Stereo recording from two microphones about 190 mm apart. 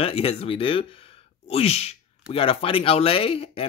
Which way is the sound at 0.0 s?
30° left (ahead or behind).